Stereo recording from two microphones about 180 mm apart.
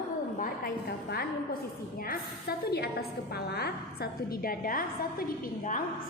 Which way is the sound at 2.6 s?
60° left (ahead or behind).